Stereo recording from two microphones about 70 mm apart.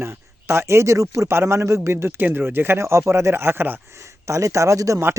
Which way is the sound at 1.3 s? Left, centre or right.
Right.